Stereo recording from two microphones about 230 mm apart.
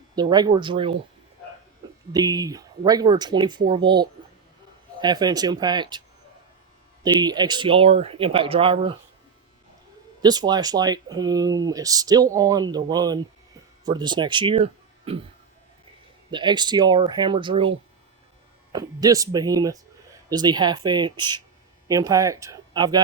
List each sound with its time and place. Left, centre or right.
0.2 s speech: centre
2.1 s speech: centre
7.0 s speech: centre
10.2 s speech: centre
16.3 s speech: centre